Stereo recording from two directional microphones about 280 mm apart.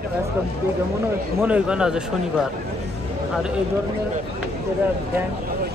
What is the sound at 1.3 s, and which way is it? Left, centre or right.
Speech, centre.